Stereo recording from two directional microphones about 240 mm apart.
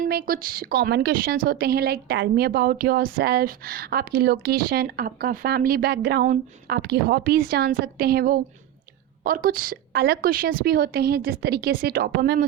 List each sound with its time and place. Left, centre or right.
0.0 s a woman's voice: right